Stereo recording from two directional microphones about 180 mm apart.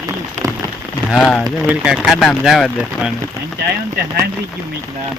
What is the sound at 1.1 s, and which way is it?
Speech, 5° left (ahead or behind).